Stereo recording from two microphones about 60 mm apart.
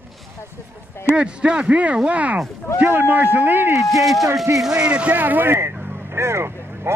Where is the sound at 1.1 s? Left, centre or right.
Centre.